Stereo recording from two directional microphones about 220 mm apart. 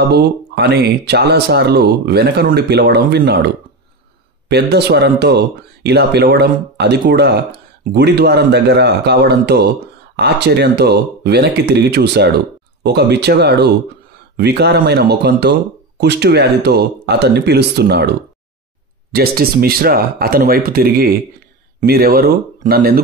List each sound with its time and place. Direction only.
0.1 s speech: 50° right (ahead or behind)
19.1 s speech: 45° right (ahead or behind)